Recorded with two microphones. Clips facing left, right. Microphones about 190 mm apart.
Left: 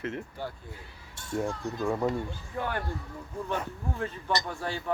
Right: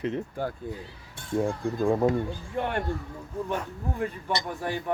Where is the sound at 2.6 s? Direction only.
25° right (ahead or behind).